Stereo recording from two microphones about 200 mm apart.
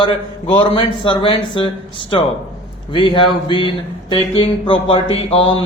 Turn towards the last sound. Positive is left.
turn(degrees=30)  # may be behind; listen again after turning